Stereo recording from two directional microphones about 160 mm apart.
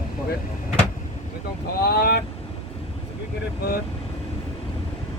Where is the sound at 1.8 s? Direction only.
90° left.